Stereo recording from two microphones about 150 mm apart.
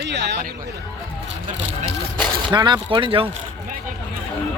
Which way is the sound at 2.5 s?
25° right (ahead or behind).